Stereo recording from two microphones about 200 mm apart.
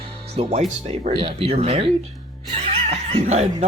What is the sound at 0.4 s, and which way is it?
Speech, 30° right (ahead or behind).